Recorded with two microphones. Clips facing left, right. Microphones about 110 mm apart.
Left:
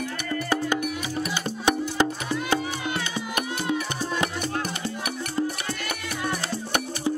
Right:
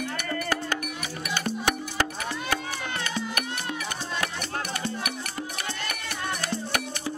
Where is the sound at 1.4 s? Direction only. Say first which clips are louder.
Left 3 dB; 20° left (ahead or behind).